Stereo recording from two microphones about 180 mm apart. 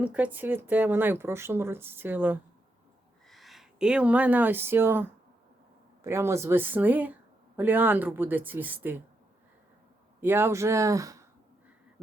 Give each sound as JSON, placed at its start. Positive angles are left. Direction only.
{"t": 0.0, "sound": "a woman's voice", "side_deg": -10}
{"t": 3.2, "sound": "a woman's voice", "side_deg": 0}
{"t": 10.2, "sound": "a woman's voice", "side_deg": -10}